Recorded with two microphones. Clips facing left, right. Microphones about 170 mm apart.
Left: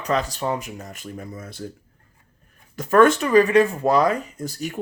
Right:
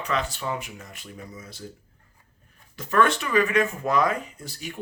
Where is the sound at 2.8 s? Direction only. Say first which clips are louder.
Left 7 dB; 45° left (ahead or behind).